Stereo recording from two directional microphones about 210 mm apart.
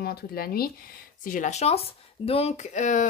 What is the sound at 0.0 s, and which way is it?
Speech, 45° left (ahead or behind).